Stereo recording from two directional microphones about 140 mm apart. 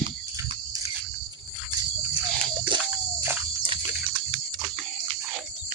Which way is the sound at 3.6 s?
35° right (ahead or behind).